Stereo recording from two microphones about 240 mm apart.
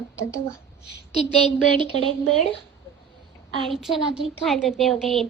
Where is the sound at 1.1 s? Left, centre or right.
Left.